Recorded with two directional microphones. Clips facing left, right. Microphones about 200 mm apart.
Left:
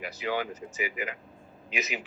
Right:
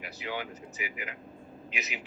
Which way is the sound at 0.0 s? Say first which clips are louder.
Left 6 dB; 90° left.